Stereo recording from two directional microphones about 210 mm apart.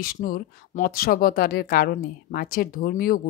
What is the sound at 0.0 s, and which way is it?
Speech, 45° left (ahead or behind).